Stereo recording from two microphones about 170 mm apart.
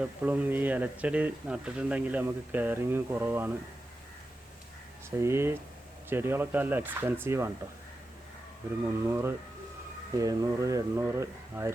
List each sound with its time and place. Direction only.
0.0 s speech: 10° right (ahead or behind)
5.2 s speech: 15° right (ahead or behind)
8.9 s speech: 15° right (ahead or behind)